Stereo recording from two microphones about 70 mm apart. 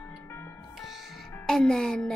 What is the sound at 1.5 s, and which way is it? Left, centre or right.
Speech, centre.